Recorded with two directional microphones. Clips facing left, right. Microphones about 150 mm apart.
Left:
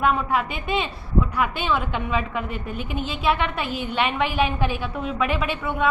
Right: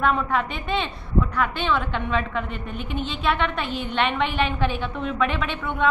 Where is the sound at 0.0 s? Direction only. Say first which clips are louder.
Left 1 dB; 10° left (ahead or behind).